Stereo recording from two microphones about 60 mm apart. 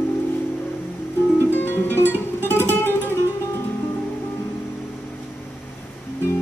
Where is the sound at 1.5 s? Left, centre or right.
Left.